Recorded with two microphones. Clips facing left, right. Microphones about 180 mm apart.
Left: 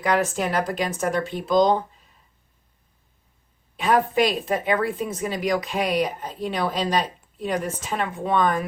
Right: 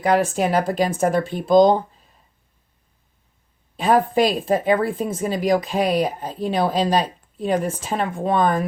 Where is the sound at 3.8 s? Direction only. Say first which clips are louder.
Right 3 dB; 30° right (ahead or behind).